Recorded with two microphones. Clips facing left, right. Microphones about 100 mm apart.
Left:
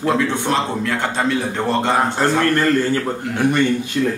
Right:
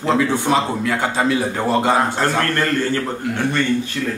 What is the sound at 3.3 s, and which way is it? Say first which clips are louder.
Speech: left 3 dB; 15° left (ahead or behind).